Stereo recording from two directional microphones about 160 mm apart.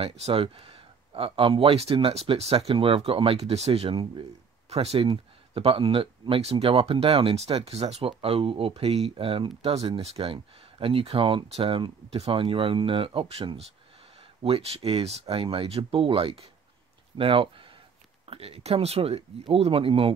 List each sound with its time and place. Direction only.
0.0 s speech: 40° right (ahead or behind)